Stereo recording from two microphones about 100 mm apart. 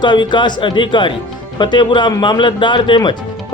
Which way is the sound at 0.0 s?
50° left (ahead or behind).